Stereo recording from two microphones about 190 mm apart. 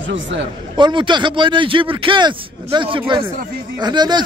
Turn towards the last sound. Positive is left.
turn(degrees=-20)  # may be behind; listen again after turning